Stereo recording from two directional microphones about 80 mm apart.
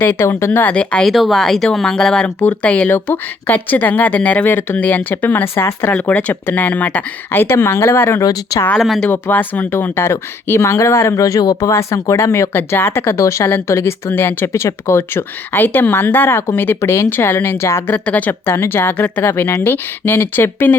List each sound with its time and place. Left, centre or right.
0.0 s speech: left
0.6 s speech: centre
1.0 s speech: centre
2.2 s speech: centre
8.2 s speech: left
8.8 s speech: centre
9.1 s speech: left
11.7 s speech: left
17.9 s speech: centre
19.3 s speech: left